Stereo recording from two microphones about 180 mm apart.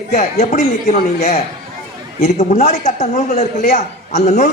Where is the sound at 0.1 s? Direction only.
45° left (ahead or behind).